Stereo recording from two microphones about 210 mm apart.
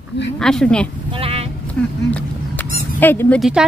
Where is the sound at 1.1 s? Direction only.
25° right (ahead or behind).